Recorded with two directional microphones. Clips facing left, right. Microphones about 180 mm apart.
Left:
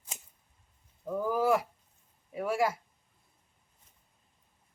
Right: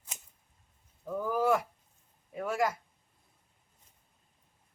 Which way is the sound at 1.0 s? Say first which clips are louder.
Left 1 dB; 10° left (ahead or behind).